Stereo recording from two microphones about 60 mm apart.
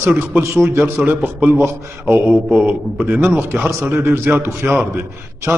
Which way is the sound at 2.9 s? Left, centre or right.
Right.